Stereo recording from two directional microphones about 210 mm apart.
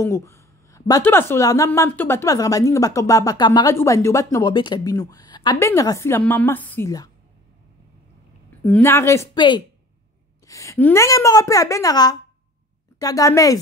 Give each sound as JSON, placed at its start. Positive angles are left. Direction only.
{"t": 0.0, "sound": "speech", "side_deg": 15}
{"t": 8.6, "sound": "speech", "side_deg": 10}